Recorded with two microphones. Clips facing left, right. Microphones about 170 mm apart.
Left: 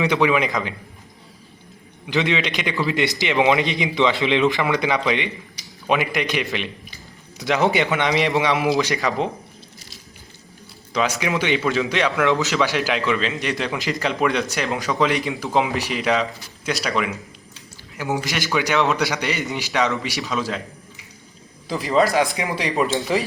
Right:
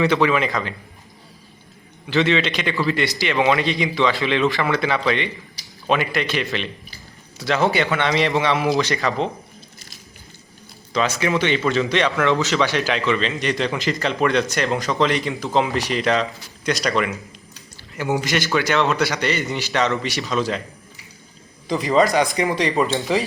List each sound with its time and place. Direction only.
0.0 s a man's voice: 15° left (ahead or behind)
2.0 s a man's voice: 15° left (ahead or behind)
10.9 s a man's voice: 10° left (ahead or behind)
18.5 s a man's voice: 15° left (ahead or behind)
21.7 s speech: centre (ahead or behind)